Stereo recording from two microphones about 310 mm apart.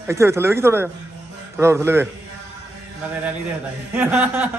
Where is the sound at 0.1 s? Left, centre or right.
Centre.